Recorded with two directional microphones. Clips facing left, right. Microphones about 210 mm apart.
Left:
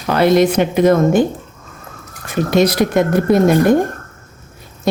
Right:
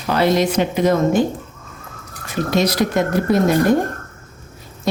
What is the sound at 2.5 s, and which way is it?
Speech, 55° left (ahead or behind).